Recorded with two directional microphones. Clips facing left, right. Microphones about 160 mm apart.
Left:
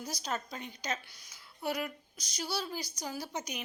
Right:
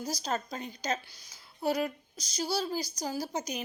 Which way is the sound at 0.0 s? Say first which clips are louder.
Right 4 dB; 35° right (ahead or behind).